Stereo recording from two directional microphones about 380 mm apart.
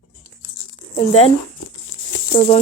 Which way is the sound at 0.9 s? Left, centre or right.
Centre.